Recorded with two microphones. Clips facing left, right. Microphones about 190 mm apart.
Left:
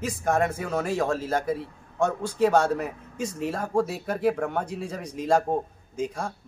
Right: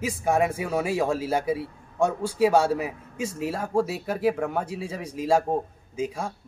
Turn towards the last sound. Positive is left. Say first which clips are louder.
# right 1 dB
turn(degrees=-5)  # may be behind; listen again after turning